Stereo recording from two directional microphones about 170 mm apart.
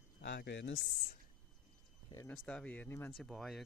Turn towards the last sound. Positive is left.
turn(degrees=0)  # may be behind; listen again after turning